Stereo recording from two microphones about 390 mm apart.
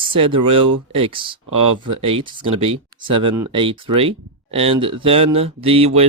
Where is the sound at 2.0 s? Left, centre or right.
Centre.